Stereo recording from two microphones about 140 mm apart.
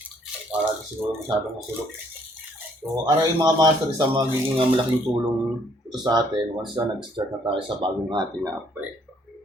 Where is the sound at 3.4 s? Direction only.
25° right (ahead or behind).